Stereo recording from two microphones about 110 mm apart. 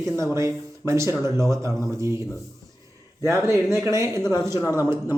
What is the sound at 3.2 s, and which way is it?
A man's voice, 25° right (ahead or behind).